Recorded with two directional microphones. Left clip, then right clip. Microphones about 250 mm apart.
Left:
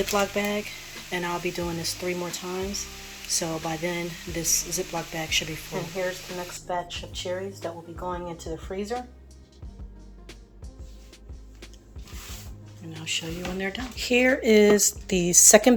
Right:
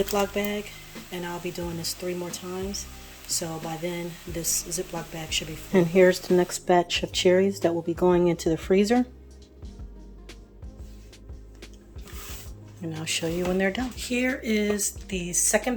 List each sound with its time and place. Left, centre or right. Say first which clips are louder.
0.0 s speech: left 1 dB; centre
6.0 s speech: right 12 dB; right
13.1 s speech: right 3 dB; centre
13.9 s a woman's voice: left 6 dB; centre